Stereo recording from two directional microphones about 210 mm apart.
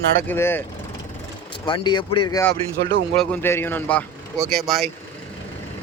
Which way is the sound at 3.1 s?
5° left (ahead or behind).